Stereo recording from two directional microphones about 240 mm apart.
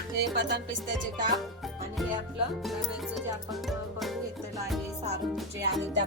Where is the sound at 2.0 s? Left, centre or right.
Centre.